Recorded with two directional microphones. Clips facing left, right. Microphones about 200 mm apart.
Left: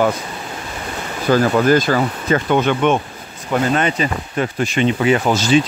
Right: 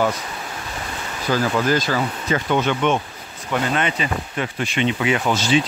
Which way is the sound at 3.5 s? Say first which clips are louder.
Left 4 dB; 40° left (ahead or behind).